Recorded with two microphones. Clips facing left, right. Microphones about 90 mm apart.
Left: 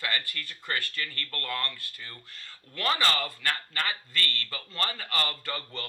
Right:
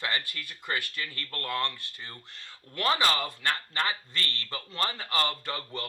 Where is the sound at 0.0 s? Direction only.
20° right (ahead or behind).